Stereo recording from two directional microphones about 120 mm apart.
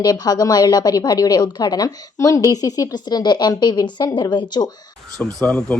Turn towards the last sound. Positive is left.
turn(degrees=5)  # may be behind; listen again after turning